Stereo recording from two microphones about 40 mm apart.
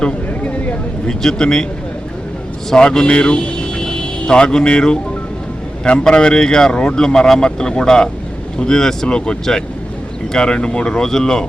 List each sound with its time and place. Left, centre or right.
0.4 s a sound: left
1.0 s a man's voice: centre
2.6 s a man's voice: centre